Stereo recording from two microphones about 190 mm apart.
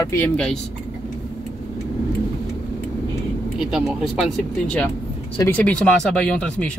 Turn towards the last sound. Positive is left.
turn(degrees=5)  # may be behind; listen again after turning